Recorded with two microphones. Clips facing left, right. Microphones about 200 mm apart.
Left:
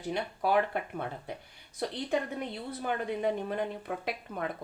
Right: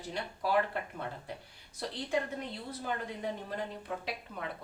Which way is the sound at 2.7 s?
60° left (ahead or behind).